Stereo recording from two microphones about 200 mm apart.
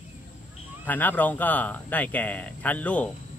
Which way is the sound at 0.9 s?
10° left (ahead or behind).